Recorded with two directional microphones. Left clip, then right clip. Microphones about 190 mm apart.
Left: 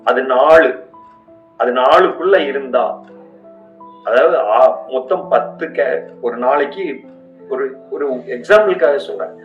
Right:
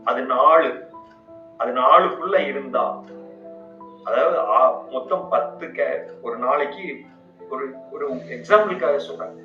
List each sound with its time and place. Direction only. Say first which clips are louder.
0.0 s a man's voice: left 5 dB; 40° left (ahead or behind)
4.0 s a man's voice: left 7 dB; 40° left (ahead or behind)